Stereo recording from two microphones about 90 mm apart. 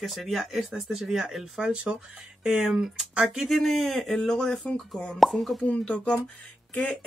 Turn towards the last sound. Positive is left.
turn(degrees=15)  # may be behind; listen again after turning